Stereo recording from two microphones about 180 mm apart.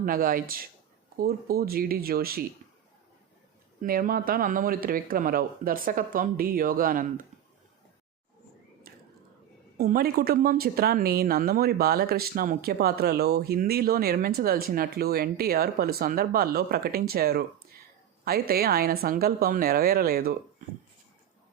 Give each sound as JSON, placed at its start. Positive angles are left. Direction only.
{"t": 0.0, "sound": "a woman's voice", "side_deg": -50}
{"t": 3.8, "sound": "speech", "side_deg": -50}
{"t": 8.9, "sound": "whispering", "side_deg": -55}
{"t": 9.7, "sound": "a woman's voice", "side_deg": -55}